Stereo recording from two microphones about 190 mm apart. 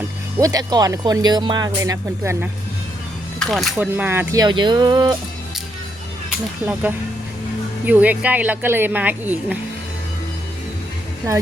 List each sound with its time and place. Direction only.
0.3 s speech: 20° right (ahead or behind)
3.4 s speech: centre (ahead or behind); by 5.1 s 25° right (ahead or behind)
6.6 s speech: 10° right (ahead or behind)
7.9 s speech: 10° right (ahead or behind)